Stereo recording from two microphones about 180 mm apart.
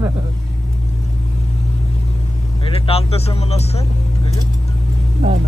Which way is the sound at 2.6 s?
30° left (ahead or behind).